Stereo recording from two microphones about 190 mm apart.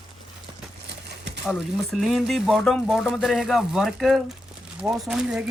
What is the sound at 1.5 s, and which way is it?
Speech, 5° right (ahead or behind).